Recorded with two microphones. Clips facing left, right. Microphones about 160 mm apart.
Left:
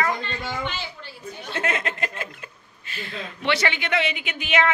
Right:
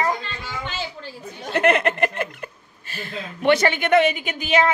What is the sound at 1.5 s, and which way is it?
Speech, 65° right (ahead or behind).